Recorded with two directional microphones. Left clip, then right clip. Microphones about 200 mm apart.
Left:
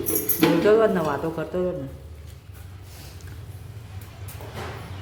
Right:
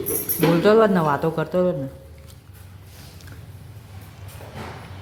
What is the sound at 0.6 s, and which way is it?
Speech, 20° right (ahead or behind).